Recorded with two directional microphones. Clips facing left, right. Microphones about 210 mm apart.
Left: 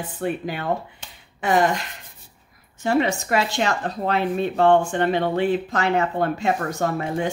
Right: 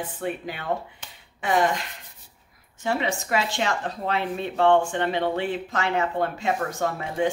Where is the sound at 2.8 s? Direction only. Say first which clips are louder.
Left 5 dB; 45° left (ahead or behind).